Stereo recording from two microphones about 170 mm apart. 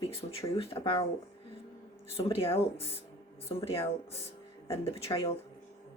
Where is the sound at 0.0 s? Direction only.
35° left (ahead or behind).